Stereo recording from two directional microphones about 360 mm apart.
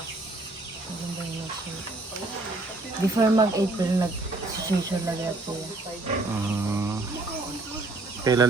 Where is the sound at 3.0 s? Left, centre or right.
Centre.